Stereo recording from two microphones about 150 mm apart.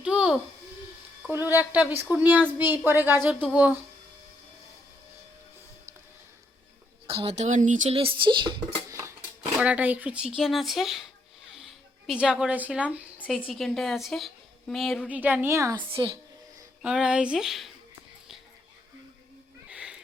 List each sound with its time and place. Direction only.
0.0 s a sound: 5° right (ahead or behind)
1.3 s a child's voice: 15° right (ahead or behind)
7.1 s speech: 40° right (ahead or behind); by 7.9 s 55° right (ahead or behind)
7.9 s speech: 35° right (ahead or behind)
8.9 s a sound: 20° right (ahead or behind)
9.6 s a woman's voice: 10° right (ahead or behind)
15.1 s a child's voice: 10° right (ahead or behind)
16.8 s speech: 5° right (ahead or behind)
19.7 s a sound: 5° right (ahead or behind)